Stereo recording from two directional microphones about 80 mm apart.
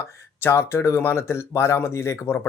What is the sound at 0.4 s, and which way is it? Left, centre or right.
Speech, left.